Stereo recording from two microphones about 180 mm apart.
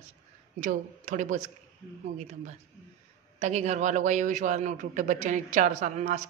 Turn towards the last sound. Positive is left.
turn(degrees=-40)  # may be behind; listen again after turning